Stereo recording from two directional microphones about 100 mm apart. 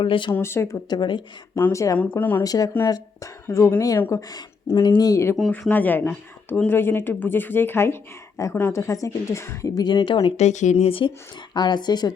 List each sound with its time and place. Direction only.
0.0 s speech: 60° left (ahead or behind)
0.3 s speech: 25° left (ahead or behind)
0.9 s speech: 50° left (ahead or behind)
1.7 s a woman's voice: 30° left (ahead or behind)
2.0 s speech: 15° left (ahead or behind)
2.4 s a woman's voice: 40° left (ahead or behind)
5.5 s a woman's voice: 20° left (ahead or behind); by 10.0 s 45° left (ahead or behind)
10.1 s speech: 65° left (ahead or behind)
11.5 s speech: 45° left (ahead or behind)